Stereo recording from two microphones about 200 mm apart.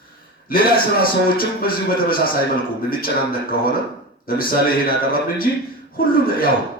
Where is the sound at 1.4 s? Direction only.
45° left (ahead or behind).